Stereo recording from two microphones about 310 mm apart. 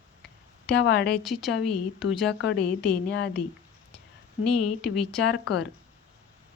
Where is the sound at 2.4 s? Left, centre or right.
Left.